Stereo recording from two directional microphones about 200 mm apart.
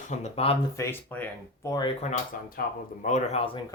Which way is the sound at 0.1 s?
35° left (ahead or behind).